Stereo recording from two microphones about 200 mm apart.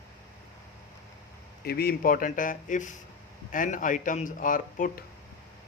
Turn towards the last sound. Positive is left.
turn(degrees=40)  # may be behind; listen again after turning